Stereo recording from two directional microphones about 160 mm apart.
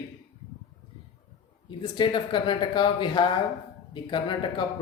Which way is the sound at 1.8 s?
30° left (ahead or behind).